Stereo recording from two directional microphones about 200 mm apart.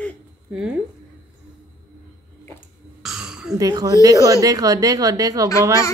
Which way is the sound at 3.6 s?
20° right (ahead or behind).